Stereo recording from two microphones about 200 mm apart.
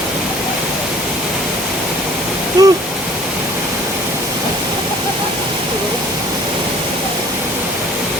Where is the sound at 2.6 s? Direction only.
20° right (ahead or behind).